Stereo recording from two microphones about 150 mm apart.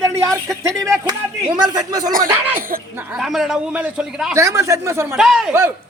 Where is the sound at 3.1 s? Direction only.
Centre (ahead or behind).